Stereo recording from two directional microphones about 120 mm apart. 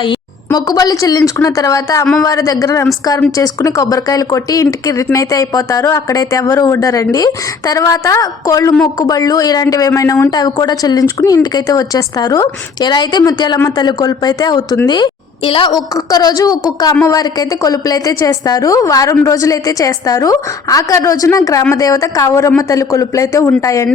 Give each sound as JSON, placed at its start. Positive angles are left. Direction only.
{"t": 0.0, "sound": "a woman's voice", "side_deg": 35}
{"t": 15.7, "sound": "a woman's voice", "side_deg": 30}